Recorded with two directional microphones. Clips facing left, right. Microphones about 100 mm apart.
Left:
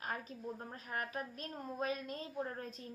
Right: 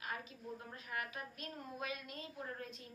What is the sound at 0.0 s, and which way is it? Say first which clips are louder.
A woman's voice: left 4 dB; 40° left (ahead or behind).